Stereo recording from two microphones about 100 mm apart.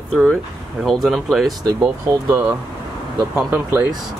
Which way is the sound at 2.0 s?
35° right (ahead or behind).